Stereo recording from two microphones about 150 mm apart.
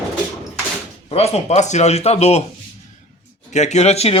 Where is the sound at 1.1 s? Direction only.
45° left (ahead or behind).